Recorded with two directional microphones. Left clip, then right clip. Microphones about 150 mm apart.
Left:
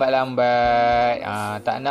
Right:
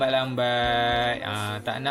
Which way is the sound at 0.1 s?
45° left (ahead or behind).